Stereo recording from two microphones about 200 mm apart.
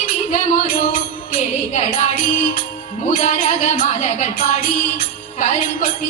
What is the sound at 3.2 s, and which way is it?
Music, 35° left (ahead or behind).